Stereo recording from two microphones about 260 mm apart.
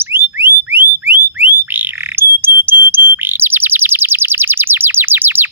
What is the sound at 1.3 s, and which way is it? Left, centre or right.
Bird, centre.